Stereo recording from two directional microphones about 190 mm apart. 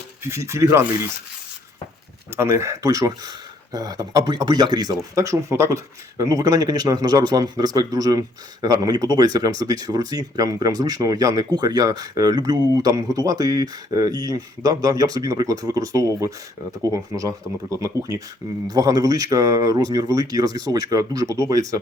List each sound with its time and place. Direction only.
0.3 s speech: 15° right (ahead or behind)
2.3 s speech: 15° right (ahead or behind)